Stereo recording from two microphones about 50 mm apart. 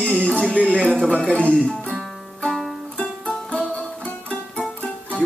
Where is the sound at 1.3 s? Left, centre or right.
Left.